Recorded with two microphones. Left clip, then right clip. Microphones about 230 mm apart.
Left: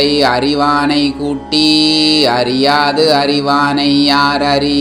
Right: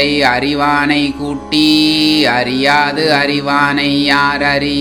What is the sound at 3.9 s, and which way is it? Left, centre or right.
Mantra, right.